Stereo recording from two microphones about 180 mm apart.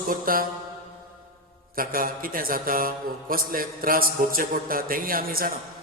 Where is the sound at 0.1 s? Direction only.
50° right (ahead or behind).